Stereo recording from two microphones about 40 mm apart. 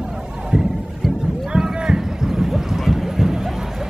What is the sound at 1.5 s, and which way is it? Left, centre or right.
Clip-clop, right.